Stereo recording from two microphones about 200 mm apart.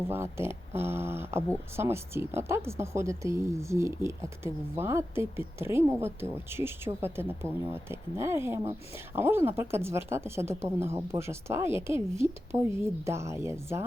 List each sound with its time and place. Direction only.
0.1 s speech: 10° right (ahead or behind)